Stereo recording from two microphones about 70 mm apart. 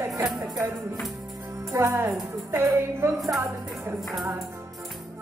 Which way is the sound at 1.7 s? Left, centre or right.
Right.